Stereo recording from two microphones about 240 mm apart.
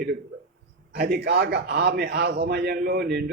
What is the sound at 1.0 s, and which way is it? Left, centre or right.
A man's voice, right.